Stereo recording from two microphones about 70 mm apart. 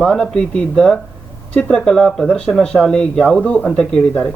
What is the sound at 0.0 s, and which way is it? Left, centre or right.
Speech, centre.